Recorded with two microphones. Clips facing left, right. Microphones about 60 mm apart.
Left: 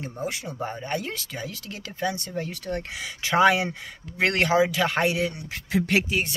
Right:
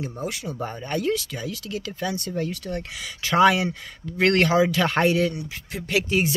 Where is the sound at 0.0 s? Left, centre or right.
Left.